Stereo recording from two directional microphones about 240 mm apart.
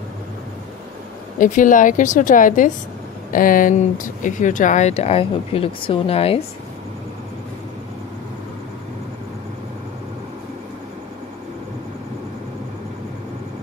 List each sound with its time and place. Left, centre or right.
1.4 s a woman's voice: left